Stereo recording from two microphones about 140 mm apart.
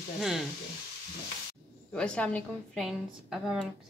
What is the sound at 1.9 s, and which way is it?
Speech, 5° left (ahead or behind).